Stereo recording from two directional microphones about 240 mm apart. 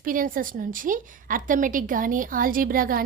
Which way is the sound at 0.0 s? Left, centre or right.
Right.